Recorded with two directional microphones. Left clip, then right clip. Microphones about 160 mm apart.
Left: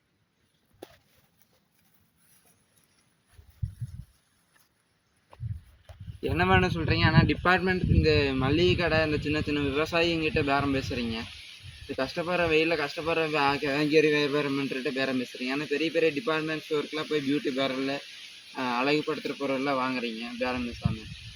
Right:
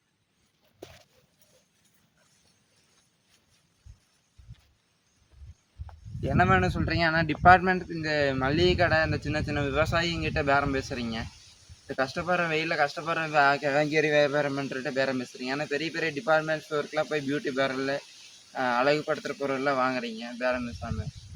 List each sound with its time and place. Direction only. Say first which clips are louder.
6.5 s speech: even; 20° right (ahead or behind)